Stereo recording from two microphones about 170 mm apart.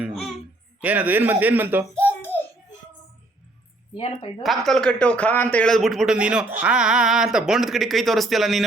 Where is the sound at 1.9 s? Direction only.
10° left (ahead or behind).